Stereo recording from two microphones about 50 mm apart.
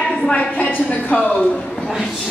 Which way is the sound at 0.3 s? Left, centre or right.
Left.